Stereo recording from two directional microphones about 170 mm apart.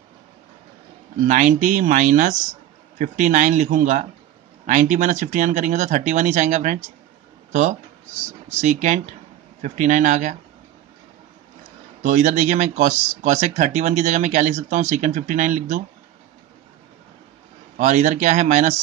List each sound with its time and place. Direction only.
1.2 s speech: 50° right (ahead or behind)
12.0 s speech: 45° right (ahead or behind)
17.7 s speech: 45° right (ahead or behind)